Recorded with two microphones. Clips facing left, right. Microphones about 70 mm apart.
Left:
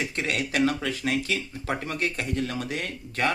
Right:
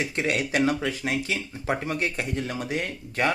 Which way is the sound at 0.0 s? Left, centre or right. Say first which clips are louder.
Right 2 dB; centre.